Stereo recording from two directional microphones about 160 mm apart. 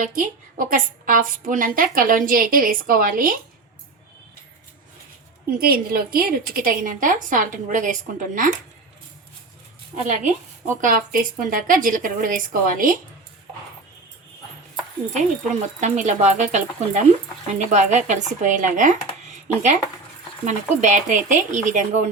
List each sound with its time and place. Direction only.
0.0 s a woman's voice: 60° right (ahead or behind)
5.5 s a woman's voice: 70° right (ahead or behind)
9.9 s a woman's voice: 50° right (ahead or behind)
15.1 s speech: 50° right (ahead or behind)
20.4 s speech: 50° right (ahead or behind)